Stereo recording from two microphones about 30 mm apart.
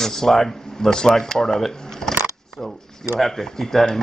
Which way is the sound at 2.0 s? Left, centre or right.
Left.